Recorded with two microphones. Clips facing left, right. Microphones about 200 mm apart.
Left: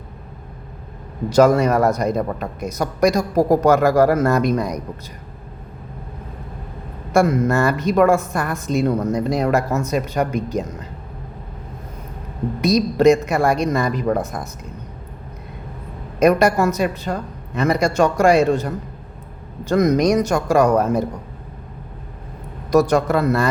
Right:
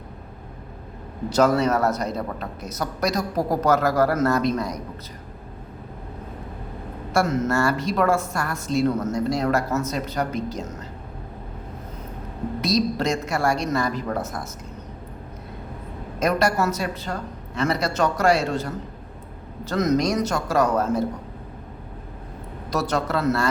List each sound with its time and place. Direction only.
1.4 s a woman's voice: 10° left (ahead or behind)
7.1 s a woman's voice: 15° left (ahead or behind)
12.6 s a woman's voice: 15° left (ahead or behind)
16.2 s a woman's voice: 15° left (ahead or behind)
22.7 s a woman's voice: 15° left (ahead or behind)